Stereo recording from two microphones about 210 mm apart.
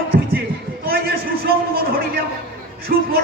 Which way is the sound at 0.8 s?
45° right (ahead or behind).